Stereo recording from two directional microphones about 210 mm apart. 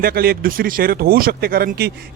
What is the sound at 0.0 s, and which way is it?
Speech, 45° right (ahead or behind).